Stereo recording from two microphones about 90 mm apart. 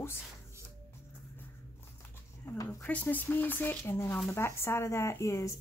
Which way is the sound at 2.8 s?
20° left (ahead or behind).